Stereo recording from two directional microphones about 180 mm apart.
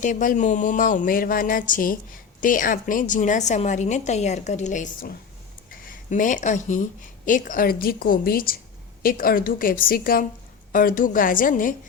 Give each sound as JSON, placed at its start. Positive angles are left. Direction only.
{"t": 0.0, "sound": "a woman's voice", "side_deg": 45}